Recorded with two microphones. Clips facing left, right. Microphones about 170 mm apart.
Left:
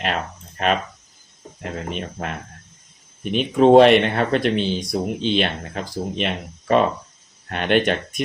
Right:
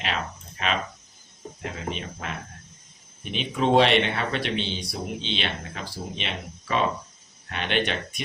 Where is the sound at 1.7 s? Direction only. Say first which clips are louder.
Left 7 dB; 50° left (ahead or behind).